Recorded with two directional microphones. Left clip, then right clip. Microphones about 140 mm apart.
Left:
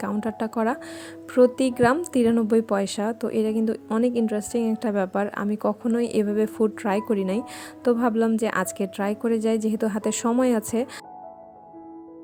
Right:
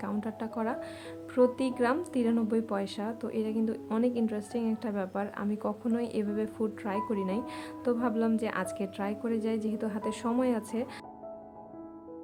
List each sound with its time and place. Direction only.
0.0 s a woman's voice: 50° left (ahead or behind)